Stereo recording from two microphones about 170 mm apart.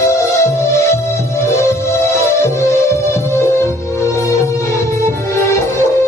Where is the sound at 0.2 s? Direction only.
15° left (ahead or behind).